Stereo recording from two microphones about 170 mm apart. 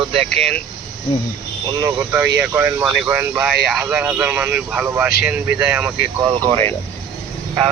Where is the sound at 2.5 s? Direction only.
15° right (ahead or behind).